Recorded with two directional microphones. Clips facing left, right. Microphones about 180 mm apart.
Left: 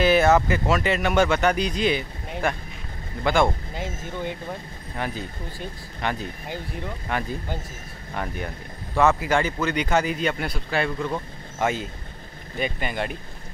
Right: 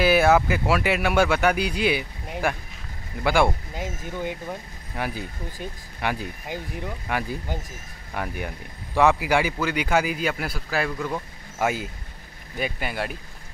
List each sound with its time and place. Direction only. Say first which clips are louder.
0.0 s speech: even; 10° right (ahead or behind)